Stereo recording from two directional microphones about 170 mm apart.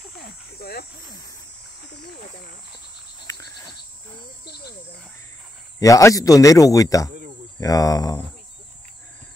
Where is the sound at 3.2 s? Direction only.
20° left (ahead or behind).